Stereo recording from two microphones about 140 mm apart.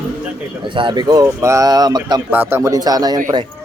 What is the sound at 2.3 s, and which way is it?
Speech, 15° right (ahead or behind).